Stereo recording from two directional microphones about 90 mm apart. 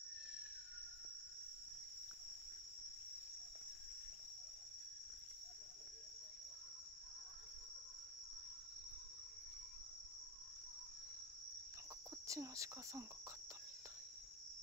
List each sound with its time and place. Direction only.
12.3 s speech: 35° right (ahead or behind)